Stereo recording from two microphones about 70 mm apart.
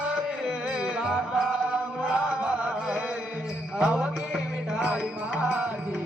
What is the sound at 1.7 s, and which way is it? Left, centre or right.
Music, centre.